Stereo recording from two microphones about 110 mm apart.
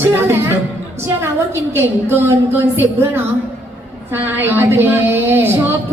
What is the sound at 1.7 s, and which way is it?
A woman's voice, 25° right (ahead or behind).